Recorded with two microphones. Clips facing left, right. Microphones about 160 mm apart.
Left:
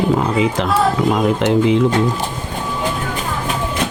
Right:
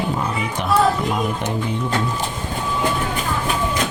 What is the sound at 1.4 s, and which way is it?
Speech, 90° left.